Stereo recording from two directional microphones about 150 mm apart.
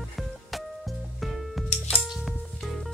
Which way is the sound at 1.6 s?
Centre (ahead or behind).